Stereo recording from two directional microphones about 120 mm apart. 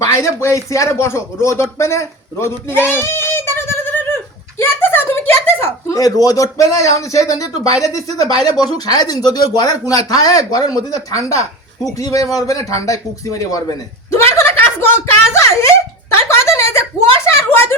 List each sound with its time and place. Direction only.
0.0 s a man's voice: 25° left (ahead or behind)
15.3 s a sound: 25° left (ahead or behind)
17.3 s speech: 20° left (ahead or behind)